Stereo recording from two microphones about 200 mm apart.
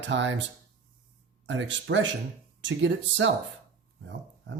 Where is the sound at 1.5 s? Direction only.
65° right (ahead or behind).